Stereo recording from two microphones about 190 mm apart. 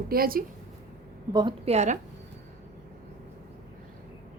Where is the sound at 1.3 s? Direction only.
25° right (ahead or behind).